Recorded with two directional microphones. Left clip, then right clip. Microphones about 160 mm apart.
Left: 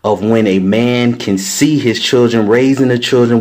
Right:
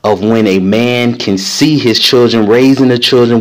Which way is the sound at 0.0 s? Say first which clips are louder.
Right 2 dB; 25° right (ahead or behind).